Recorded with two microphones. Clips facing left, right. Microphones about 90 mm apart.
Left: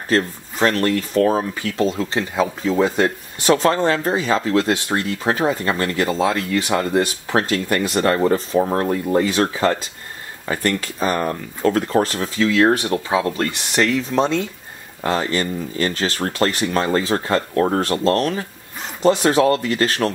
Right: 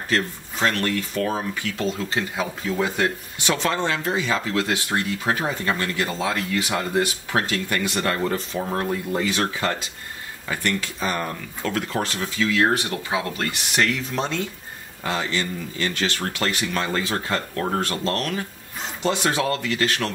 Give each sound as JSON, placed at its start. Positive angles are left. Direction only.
{"t": 0.1, "sound": "speech", "side_deg": 35}